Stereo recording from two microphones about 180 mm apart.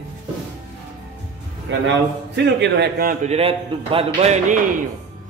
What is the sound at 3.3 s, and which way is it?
A man's voice, 35° right (ahead or behind).